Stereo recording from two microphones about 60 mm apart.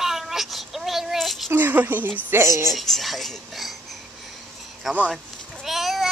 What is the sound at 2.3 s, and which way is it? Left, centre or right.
Speech, right.